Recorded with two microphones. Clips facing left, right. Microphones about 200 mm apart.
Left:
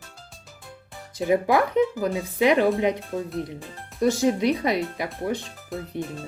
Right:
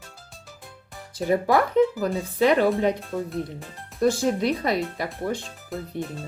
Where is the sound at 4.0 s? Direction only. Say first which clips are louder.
Left 1 dB; 15° left (ahead or behind).